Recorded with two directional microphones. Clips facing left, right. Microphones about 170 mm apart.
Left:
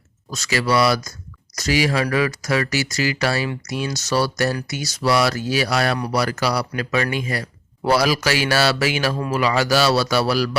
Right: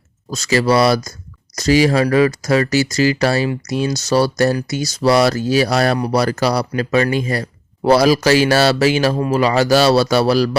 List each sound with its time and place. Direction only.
0.3 s a man's voice: 40° right (ahead or behind)